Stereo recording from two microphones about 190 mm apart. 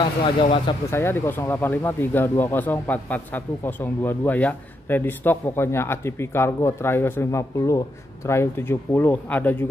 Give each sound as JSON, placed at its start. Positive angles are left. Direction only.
{"t": 0.2, "sound": "speech", "side_deg": 25}
{"t": 0.8, "sound": "speech", "side_deg": 10}